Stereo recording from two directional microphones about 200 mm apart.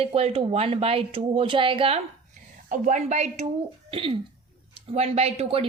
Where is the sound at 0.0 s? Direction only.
30° right (ahead or behind).